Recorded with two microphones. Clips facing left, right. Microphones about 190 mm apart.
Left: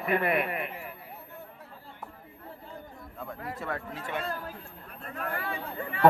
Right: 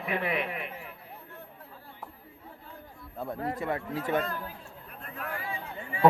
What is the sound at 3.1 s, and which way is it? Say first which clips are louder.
Speech: right 6 dB; 35° right (ahead or behind).